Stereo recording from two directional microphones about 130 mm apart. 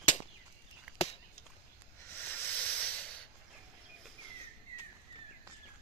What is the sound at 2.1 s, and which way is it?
Hiss, 15° left (ahead or behind).